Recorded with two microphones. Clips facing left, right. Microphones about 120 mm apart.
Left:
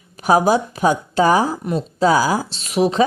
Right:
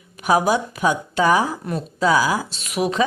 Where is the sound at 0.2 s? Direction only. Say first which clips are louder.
Left 3 dB; 35° left (ahead or behind).